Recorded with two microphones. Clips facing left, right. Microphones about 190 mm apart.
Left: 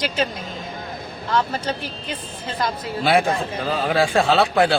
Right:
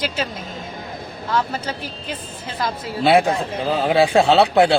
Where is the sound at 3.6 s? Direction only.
20° right (ahead or behind).